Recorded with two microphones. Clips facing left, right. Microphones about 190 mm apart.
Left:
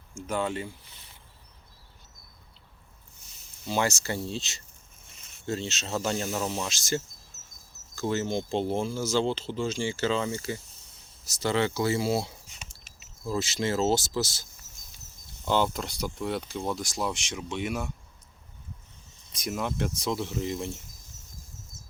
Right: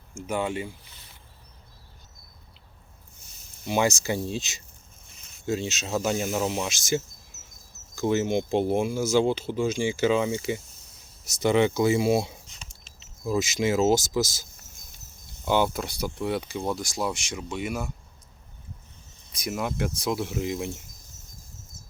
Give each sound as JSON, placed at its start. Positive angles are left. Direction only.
{"t": 0.1, "sound": "speech", "side_deg": -10}
{"t": 3.7, "sound": "speech", "side_deg": -15}
{"t": 15.4, "sound": "speech", "side_deg": -10}
{"t": 19.4, "sound": "speech", "side_deg": -5}